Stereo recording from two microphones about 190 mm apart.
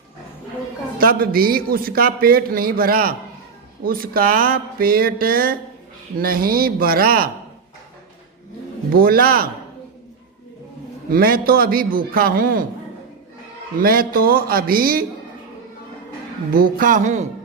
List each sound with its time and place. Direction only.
0.9 s a man's voice: 50° right (ahead or behind)
8.9 s a man's voice: 50° right (ahead or behind)
11.1 s a man's voice: 50° right (ahead or behind)
13.7 s a man's voice: 50° right (ahead or behind)
16.6 s a man's voice: 50° right (ahead or behind)